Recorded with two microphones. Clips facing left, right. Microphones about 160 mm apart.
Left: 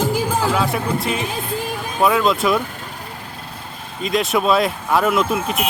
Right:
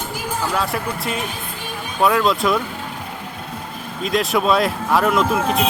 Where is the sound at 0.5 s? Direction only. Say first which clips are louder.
Left 3 dB; centre (ahead or behind).